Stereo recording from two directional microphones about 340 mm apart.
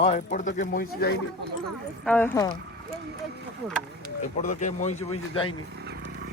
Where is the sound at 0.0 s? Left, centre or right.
Centre.